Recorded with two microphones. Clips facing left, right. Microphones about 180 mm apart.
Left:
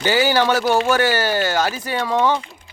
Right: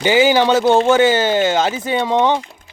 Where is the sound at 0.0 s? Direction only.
20° right (ahead or behind).